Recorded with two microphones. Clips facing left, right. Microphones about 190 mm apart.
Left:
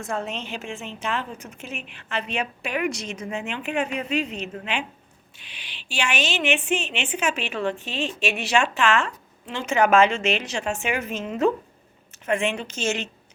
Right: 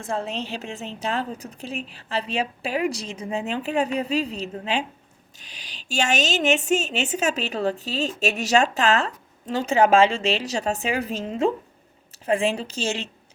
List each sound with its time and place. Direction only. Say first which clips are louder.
0.0 s a woman's voice: right 1 dB; 30° right (ahead or behind)